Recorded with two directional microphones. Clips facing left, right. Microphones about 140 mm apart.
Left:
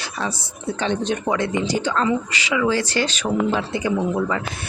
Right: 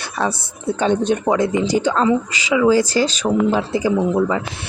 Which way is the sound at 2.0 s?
25° right (ahead or behind).